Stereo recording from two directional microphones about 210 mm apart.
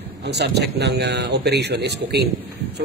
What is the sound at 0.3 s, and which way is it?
A man's voice, 55° right (ahead or behind).